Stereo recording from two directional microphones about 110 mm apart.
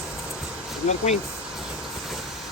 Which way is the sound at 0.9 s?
90° left.